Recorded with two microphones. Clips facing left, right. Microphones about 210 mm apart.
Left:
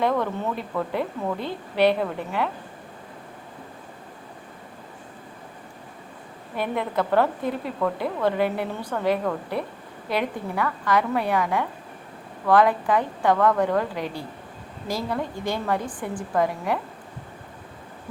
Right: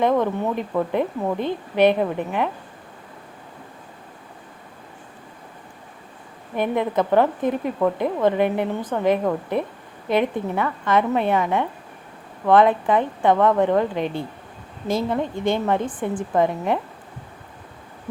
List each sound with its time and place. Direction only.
0.0 s a woman's voice: 20° right (ahead or behind)
6.6 s a woman's voice: 20° right (ahead or behind)